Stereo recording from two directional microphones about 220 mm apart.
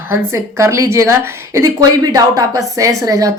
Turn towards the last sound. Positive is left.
turn(degrees=-15)  # may be behind; listen again after turning